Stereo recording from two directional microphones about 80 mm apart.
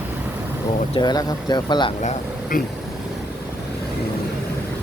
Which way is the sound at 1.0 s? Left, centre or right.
Left.